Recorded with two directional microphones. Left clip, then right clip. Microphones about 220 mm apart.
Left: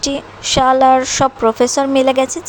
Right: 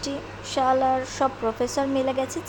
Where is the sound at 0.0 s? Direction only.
25° left (ahead or behind).